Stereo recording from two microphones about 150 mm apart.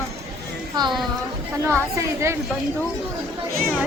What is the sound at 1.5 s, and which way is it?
Speech, 20° right (ahead or behind).